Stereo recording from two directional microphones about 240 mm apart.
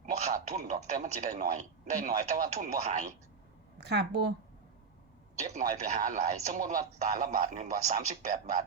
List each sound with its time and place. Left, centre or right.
0.0 s a man's voice: right
3.8 s a woman's voice: right
5.5 s a man's voice: right